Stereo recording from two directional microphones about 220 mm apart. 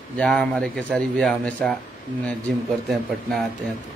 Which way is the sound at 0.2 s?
5° left (ahead or behind).